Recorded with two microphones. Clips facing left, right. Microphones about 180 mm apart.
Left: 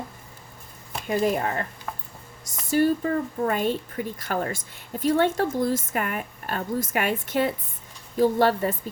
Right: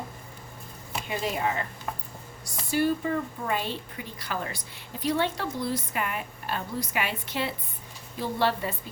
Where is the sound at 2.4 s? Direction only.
45° left (ahead or behind).